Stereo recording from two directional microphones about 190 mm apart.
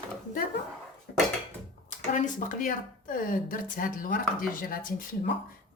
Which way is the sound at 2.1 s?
45° left (ahead or behind).